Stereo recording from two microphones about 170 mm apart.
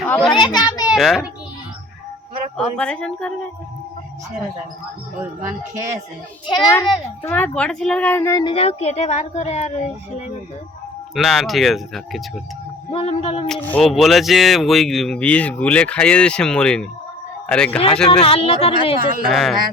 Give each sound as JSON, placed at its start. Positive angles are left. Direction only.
{"t": 0.0, "sound": "a child's voice", "side_deg": 5}
{"t": 0.3, "sound": "a child's voice", "side_deg": 25}
{"t": 0.9, "sound": "a child's voice", "side_deg": 0}
{"t": 2.6, "sound": "speech", "side_deg": 5}
{"t": 6.5, "sound": "a child's voice", "side_deg": 25}
{"t": 7.2, "sound": "speech", "side_deg": 10}
{"t": 8.5, "sound": "speech", "side_deg": 35}
{"t": 11.1, "sound": "speech", "side_deg": 0}
{"t": 12.9, "sound": "speech", "side_deg": 35}
{"t": 13.5, "sound": "a man's voice", "side_deg": 5}
{"t": 18.1, "sound": "speech", "side_deg": 35}
{"t": 19.2, "sound": "speech", "side_deg": 0}